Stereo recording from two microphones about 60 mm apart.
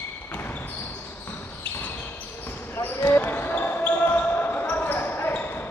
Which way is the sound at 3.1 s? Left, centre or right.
Left.